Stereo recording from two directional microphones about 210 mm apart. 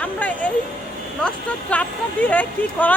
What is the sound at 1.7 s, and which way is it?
Speech, 5° left (ahead or behind).